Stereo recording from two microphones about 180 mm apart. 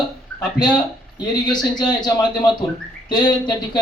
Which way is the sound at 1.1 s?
25° left (ahead or behind).